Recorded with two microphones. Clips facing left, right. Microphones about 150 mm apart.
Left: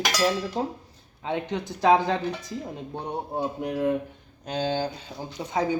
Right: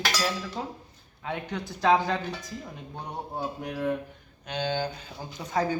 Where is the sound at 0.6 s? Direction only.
35° left (ahead or behind).